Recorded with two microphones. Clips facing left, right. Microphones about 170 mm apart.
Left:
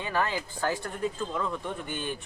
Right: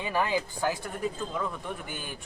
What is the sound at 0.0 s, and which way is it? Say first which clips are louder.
Speech: right 1 dB; 15° right (ahead or behind).